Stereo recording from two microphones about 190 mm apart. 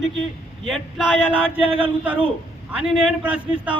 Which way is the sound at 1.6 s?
30° right (ahead or behind).